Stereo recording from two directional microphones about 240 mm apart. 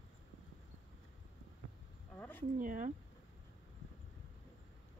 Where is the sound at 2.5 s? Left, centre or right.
Right.